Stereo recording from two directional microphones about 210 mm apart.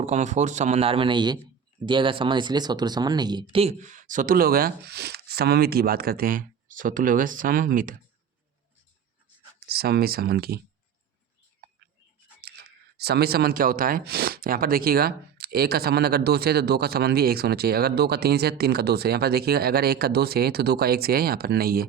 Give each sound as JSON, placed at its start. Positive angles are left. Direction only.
{"t": 0.0, "sound": "speech", "side_deg": -35}
{"t": 9.6, "sound": "speech", "side_deg": -50}
{"t": 12.4, "sound": "speech", "side_deg": -50}